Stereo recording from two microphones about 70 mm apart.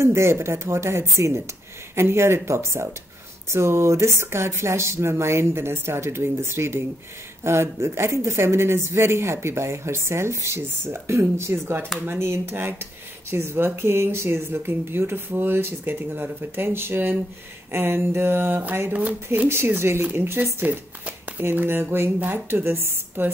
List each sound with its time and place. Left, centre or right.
0.0 s speech: right
19.3 s speech: right